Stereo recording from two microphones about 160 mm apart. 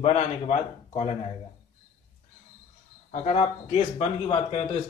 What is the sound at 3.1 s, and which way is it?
A man's voice, 40° left (ahead or behind).